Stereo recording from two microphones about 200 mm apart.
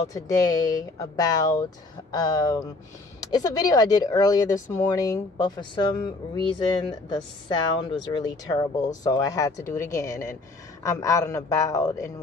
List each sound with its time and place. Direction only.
0.1 s a man's voice: 20° left (ahead or behind)